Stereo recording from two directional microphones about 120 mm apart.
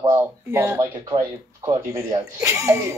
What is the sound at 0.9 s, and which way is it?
Speech, 40° right (ahead or behind).